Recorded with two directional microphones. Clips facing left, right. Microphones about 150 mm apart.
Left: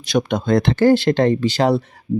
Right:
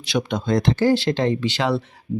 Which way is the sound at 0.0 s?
45° left (ahead or behind).